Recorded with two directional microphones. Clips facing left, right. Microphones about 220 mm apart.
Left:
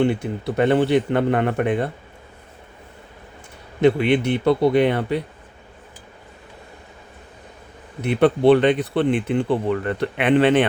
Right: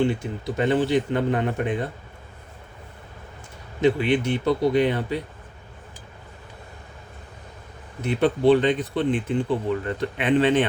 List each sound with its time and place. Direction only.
0.0 s speech: 60° left (ahead or behind)
3.8 s speech: 65° left (ahead or behind)
8.0 s speech: 65° left (ahead or behind)